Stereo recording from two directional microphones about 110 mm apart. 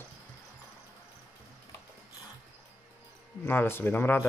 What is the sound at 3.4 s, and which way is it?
Speech, 20° left (ahead or behind).